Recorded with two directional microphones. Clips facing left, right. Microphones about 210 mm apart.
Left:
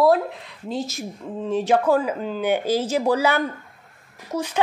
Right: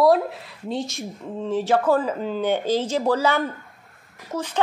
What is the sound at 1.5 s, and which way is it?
A woman's voice, 15° left (ahead or behind).